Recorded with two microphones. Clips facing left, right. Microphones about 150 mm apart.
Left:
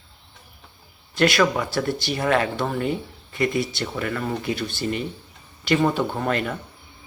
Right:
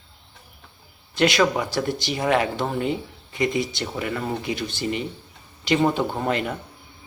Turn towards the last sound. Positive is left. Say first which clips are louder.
# even
turn(degrees=-20)  # may be behind; listen again after turning